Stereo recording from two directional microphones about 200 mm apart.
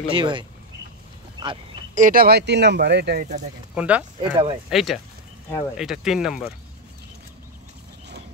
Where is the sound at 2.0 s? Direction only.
45° right (ahead or behind).